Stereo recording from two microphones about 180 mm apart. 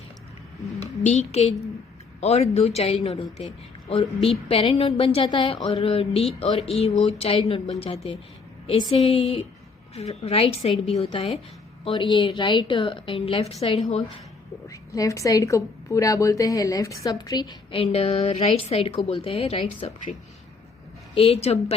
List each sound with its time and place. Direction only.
0.8 s a child's voice: 40° left (ahead or behind)
8.9 s a woman's voice: 35° left (ahead or behind)
14.7 s a woman's voice: 20° left (ahead or behind)
21.2 s a woman's voice: 35° left (ahead or behind)